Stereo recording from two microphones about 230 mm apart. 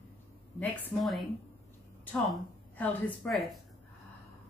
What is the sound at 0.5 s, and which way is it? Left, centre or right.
Speech, centre.